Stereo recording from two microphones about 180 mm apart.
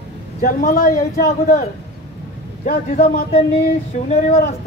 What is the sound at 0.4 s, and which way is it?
Speech, 50° left (ahead or behind).